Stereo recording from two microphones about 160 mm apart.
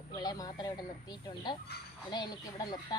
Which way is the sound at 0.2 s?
25° left (ahead or behind).